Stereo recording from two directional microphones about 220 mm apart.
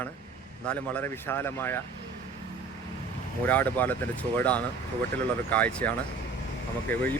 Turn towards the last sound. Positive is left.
turn(degrees=10)  # may be behind; listen again after turning